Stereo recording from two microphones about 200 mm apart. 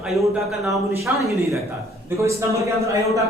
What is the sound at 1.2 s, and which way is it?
Speech, 15° right (ahead or behind).